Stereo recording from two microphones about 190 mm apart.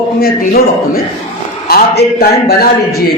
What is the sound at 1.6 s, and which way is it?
A man's voice, 55° left (ahead or behind).